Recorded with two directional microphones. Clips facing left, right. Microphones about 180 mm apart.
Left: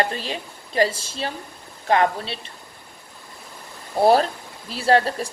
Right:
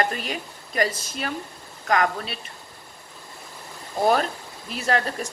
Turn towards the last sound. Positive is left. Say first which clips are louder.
# left 6 dB
turn(degrees=30)  # may be behind; listen again after turning